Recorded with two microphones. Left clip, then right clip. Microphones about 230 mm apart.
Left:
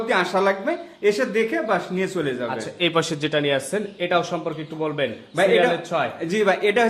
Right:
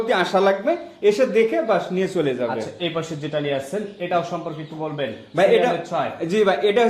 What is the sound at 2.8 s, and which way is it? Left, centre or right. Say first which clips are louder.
Speech: left 5 dB; left.